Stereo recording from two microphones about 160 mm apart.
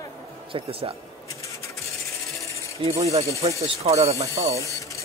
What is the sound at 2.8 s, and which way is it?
Speech, 40° right (ahead or behind).